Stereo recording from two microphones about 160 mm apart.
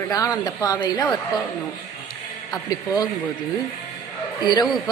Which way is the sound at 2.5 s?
25° left (ahead or behind).